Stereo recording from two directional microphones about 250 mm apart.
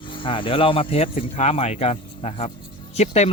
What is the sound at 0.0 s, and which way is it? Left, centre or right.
Speech, centre.